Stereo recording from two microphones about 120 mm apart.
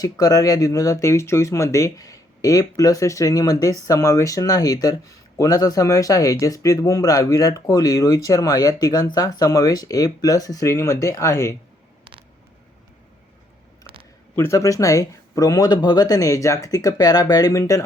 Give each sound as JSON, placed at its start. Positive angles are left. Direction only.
{"t": 0.0, "sound": "speech", "side_deg": 30}
{"t": 13.8, "sound": "a sound", "side_deg": -45}
{"t": 14.3, "sound": "speech", "side_deg": 25}